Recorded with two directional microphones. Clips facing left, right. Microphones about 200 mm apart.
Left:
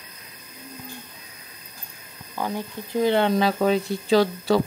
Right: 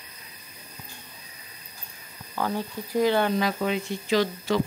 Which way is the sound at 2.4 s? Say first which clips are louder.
Even; 15° left (ahead or behind).